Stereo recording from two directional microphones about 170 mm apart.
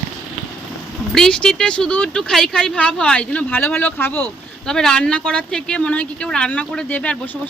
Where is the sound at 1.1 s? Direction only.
5° left (ahead or behind).